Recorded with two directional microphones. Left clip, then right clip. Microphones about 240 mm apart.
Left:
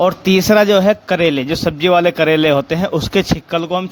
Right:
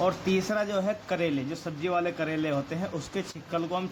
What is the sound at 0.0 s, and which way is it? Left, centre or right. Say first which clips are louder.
A man's voice: left 13 dB; left.